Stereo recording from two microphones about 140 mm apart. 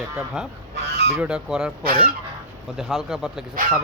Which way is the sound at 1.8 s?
90° right.